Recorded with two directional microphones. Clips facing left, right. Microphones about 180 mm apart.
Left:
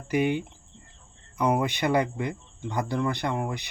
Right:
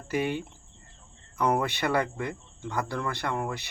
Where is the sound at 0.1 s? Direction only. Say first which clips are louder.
Left 4 dB; 15° left (ahead or behind).